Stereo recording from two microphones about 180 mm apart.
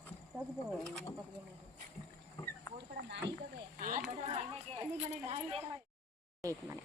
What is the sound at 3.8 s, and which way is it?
Speech, 50° right (ahead or behind).